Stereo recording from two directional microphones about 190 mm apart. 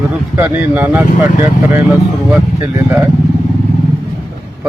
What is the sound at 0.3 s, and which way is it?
Speech, 10° right (ahead or behind).